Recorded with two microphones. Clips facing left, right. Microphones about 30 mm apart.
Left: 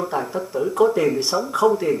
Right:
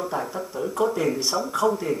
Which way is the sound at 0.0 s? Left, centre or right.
Centre.